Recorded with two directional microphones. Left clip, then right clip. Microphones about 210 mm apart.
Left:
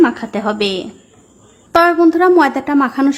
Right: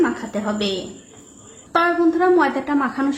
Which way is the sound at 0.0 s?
45° left (ahead or behind).